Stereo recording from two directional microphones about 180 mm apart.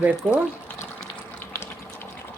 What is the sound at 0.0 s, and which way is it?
Speech, 5° right (ahead or behind).